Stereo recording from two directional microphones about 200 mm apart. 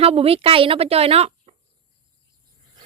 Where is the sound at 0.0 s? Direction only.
30° right (ahead or behind).